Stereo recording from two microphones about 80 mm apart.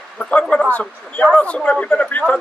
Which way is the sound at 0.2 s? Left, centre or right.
Centre.